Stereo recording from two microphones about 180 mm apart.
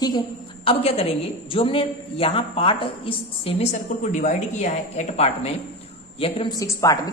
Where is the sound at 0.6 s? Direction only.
30° left (ahead or behind).